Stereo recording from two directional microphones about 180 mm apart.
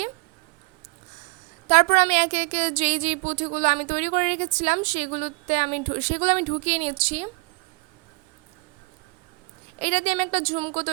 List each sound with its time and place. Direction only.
1.6 s a woman's voice: 40° right (ahead or behind)
9.7 s a woman's voice: 35° right (ahead or behind)